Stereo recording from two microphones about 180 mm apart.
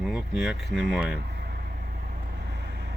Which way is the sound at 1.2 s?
65° right (ahead or behind).